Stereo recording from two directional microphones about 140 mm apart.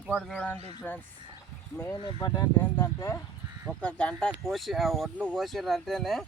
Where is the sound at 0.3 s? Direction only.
10° left (ahead or behind).